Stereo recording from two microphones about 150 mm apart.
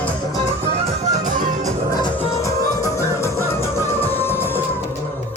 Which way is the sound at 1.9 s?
30° left (ahead or behind).